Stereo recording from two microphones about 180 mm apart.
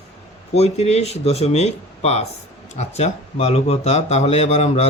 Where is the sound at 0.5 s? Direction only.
35° left (ahead or behind).